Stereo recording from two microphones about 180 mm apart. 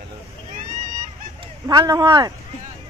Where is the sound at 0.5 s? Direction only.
45° right (ahead or behind).